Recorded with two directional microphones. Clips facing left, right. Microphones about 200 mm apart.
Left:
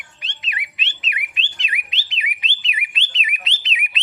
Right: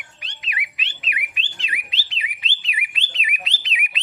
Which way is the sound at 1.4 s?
20° left (ahead or behind).